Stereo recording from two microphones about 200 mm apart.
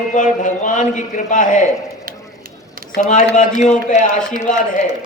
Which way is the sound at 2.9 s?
40° left (ahead or behind).